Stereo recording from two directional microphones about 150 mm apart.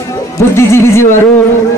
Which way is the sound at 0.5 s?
15° left (ahead or behind).